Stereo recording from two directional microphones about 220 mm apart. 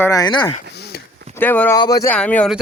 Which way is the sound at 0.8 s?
45° left (ahead or behind).